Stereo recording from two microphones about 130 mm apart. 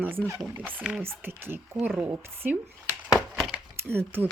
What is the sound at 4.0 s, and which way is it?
Speech, 15° right (ahead or behind).